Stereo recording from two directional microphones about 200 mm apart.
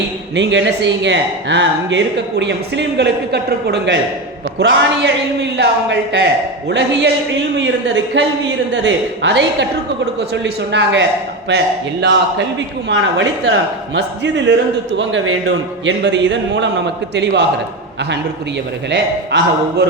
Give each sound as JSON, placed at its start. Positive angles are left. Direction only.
{"t": 0.3, "sound": "speech", "side_deg": -60}
{"t": 14.9, "sound": "speech", "side_deg": -80}
{"t": 18.9, "sound": "speech", "side_deg": -60}